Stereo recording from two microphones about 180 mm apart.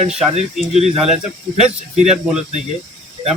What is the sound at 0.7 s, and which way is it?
Speech, 35° right (ahead or behind).